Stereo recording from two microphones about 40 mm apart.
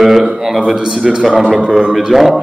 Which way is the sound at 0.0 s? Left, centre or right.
Centre.